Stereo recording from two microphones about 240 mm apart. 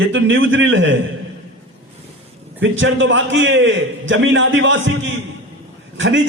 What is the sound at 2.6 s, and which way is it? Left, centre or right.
A man's voice, right.